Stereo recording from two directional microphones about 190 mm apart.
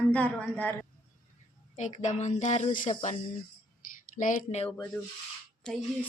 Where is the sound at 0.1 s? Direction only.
5° left (ahead or behind).